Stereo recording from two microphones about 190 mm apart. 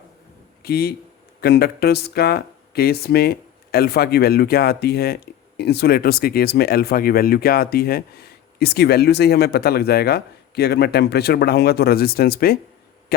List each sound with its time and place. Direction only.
0.6 s speech: 55° left (ahead or behind)